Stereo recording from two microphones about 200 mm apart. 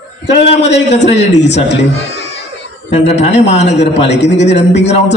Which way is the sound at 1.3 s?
60° left (ahead or behind).